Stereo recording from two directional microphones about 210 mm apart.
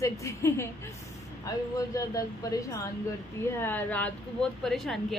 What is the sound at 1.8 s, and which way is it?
Speech, 15° left (ahead or behind).